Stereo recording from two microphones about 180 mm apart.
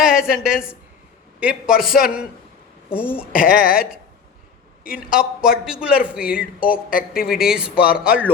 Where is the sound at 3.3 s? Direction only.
50° left (ahead or behind).